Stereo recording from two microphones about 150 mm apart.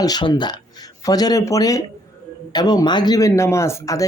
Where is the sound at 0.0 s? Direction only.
25° left (ahead or behind).